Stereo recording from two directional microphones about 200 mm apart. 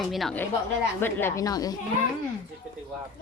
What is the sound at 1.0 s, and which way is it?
Speech, 15° left (ahead or behind).